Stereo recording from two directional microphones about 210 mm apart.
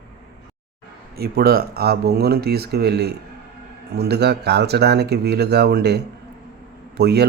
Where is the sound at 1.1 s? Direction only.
50° right (ahead or behind).